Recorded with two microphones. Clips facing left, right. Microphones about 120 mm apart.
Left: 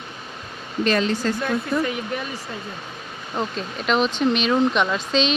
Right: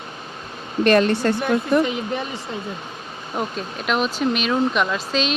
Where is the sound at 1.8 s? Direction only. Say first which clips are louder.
Right 3 dB; 20° right (ahead or behind).